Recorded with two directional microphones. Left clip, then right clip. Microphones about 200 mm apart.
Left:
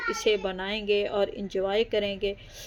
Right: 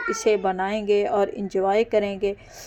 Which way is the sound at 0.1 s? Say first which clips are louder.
Right 5 dB; 10° right (ahead or behind).